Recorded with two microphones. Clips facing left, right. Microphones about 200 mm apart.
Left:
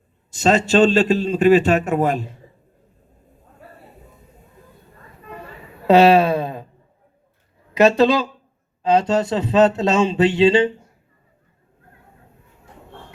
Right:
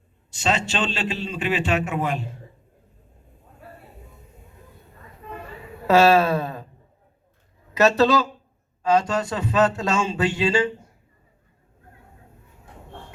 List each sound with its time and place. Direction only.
0.3 s a man's voice: 40° left (ahead or behind)
5.9 s speech: 15° left (ahead or behind)
7.8 s speech: 15° left (ahead or behind)